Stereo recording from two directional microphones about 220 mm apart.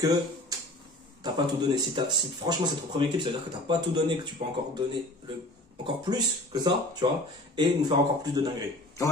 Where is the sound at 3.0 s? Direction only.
20° right (ahead or behind).